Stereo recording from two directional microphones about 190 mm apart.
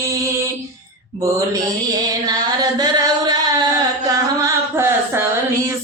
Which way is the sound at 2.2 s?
20° right (ahead or behind).